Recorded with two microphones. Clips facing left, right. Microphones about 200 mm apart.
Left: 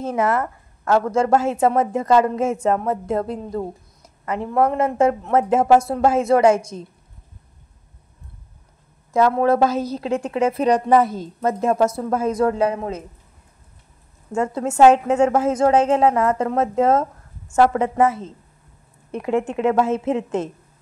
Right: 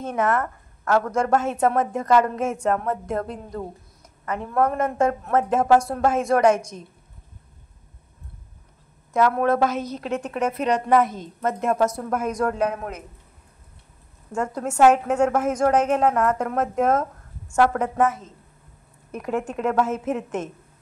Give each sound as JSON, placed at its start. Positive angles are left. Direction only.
{"t": 0.0, "sound": "a woman's voice", "side_deg": 25}
{"t": 9.1, "sound": "a woman's voice", "side_deg": 30}
{"t": 14.3, "sound": "a woman's voice", "side_deg": 25}